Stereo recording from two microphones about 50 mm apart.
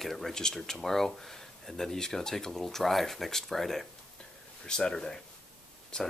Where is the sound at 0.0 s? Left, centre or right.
Centre.